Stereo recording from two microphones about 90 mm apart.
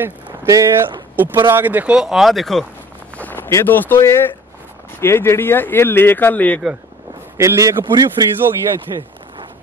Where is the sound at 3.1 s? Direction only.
20° left (ahead or behind).